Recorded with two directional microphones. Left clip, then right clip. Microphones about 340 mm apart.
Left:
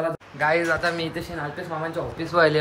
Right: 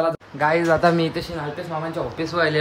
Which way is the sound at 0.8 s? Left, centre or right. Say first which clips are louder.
Right 7 dB; right.